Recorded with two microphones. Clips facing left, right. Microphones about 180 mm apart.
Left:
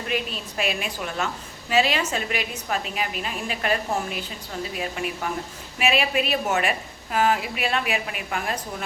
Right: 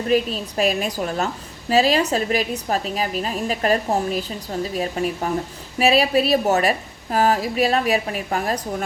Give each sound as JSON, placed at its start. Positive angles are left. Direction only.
{"t": 0.1, "sound": "a woman's voice", "side_deg": -35}